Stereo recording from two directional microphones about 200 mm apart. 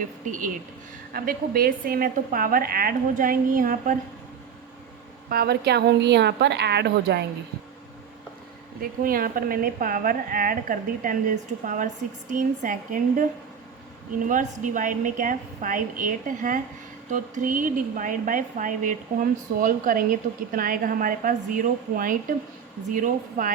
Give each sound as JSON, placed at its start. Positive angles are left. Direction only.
{"t": 0.3, "sound": "a woman's voice", "side_deg": -40}
{"t": 5.3, "sound": "a woman's voice", "side_deg": -50}
{"t": 8.8, "sound": "a woman's voice", "side_deg": -45}